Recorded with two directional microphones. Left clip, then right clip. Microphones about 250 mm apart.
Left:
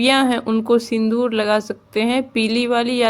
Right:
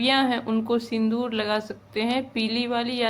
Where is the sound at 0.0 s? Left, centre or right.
Left.